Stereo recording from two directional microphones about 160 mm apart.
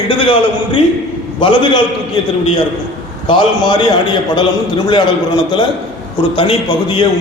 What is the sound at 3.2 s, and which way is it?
Speech, 30° left (ahead or behind).